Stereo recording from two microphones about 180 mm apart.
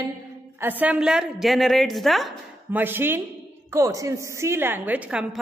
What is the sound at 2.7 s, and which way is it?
A woman's voice, 10° right (ahead or behind).